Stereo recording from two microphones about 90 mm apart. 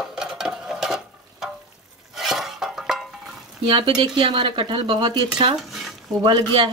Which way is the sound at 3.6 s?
70° right (ahead or behind).